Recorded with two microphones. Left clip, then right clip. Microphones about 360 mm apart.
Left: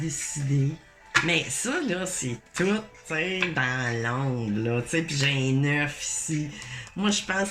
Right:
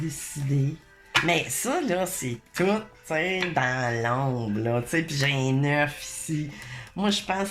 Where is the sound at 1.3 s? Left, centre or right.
Centre.